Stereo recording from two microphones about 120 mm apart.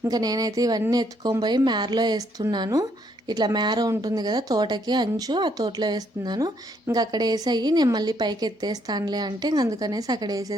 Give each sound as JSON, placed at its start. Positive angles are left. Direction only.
{"t": 0.0, "sound": "a woman's voice", "side_deg": -30}